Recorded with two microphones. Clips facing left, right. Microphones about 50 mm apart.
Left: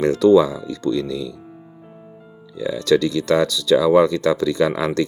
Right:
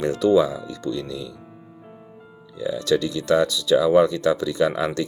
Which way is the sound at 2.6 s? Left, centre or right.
Left.